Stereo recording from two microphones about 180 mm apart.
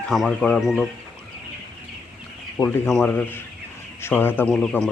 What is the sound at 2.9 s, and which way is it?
A man's voice, 5° left (ahead or behind).